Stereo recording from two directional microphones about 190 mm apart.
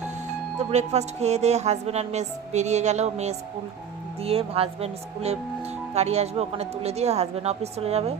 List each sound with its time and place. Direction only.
0.7 s speech: 35° right (ahead or behind)